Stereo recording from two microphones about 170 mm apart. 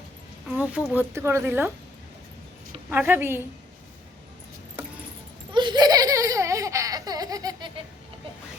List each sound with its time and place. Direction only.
0.5 s speech: 10° right (ahead or behind)
2.9 s speech: 10° right (ahead or behind)
5.5 s laughter: 25° right (ahead or behind)